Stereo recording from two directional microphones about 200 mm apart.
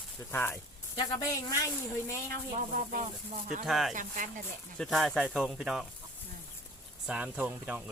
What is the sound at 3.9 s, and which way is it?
Speech, 40° right (ahead or behind).